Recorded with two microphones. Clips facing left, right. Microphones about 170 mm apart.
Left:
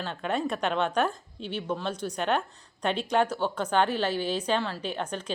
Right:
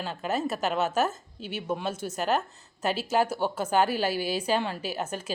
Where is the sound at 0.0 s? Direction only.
5° right (ahead or behind).